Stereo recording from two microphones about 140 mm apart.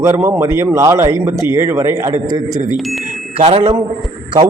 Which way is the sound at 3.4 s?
40° right (ahead or behind).